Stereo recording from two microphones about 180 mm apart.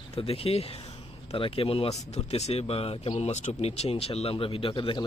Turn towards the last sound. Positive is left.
turn(degrees=25)  # may be behind; listen again after turning